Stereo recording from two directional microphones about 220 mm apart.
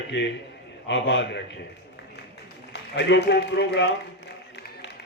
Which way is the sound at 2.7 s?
55° left (ahead or behind).